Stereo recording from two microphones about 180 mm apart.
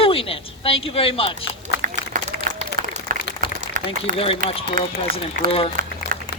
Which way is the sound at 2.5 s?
50° right (ahead or behind).